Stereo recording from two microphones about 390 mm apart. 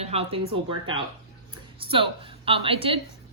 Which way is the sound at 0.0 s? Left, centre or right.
Centre.